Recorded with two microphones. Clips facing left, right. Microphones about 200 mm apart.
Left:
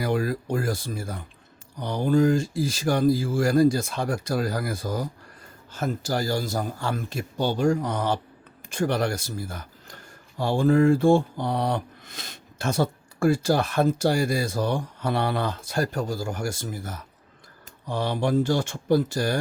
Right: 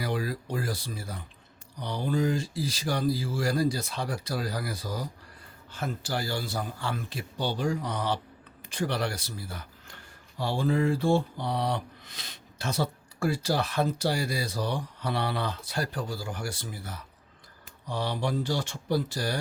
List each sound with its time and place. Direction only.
0.0 s speech: 50° left (ahead or behind)